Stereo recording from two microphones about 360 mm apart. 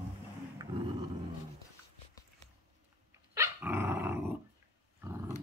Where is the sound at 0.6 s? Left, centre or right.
Centre.